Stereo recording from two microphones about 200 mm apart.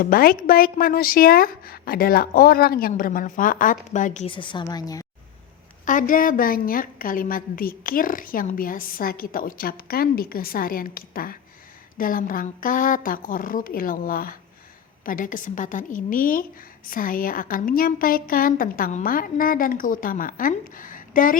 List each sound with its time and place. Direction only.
0.0 s a woman's voice: 45° left (ahead or behind)
4.3 s a woman's voice: 25° left (ahead or behind)
5.8 s a woman's voice: 40° left (ahead or behind)